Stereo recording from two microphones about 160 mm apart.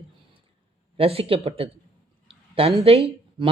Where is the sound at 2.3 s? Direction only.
35° right (ahead or behind).